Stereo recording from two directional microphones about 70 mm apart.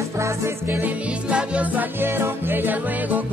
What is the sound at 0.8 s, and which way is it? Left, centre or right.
Music, centre.